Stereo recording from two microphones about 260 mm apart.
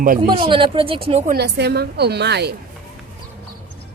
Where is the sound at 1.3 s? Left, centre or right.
Right.